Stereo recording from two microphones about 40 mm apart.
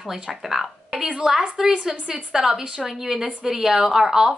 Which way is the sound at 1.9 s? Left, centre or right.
Right.